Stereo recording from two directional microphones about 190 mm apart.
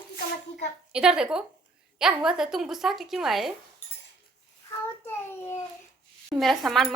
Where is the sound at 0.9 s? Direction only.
5° right (ahead or behind).